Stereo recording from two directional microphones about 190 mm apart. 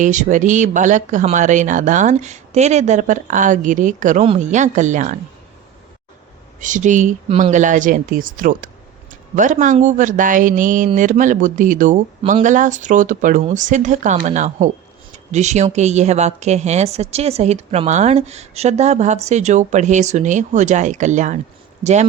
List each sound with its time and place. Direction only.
0.0 s speech: 40° right (ahead or behind)
6.6 s speech: 40° right (ahead or behind)